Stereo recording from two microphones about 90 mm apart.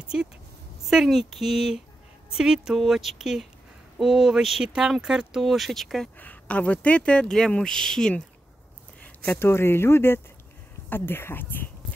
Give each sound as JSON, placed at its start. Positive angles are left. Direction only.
{"t": 0.1, "sound": "speech", "side_deg": -5}
{"t": 6.1, "sound": "speech", "side_deg": 15}
{"t": 9.0, "sound": "a sound", "side_deg": 15}
{"t": 9.4, "sound": "speech", "side_deg": 25}